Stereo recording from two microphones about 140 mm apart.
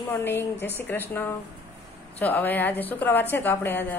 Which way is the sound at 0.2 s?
15° left (ahead or behind).